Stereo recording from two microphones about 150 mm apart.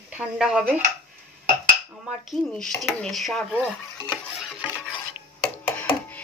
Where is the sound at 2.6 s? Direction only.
Centre (ahead or behind).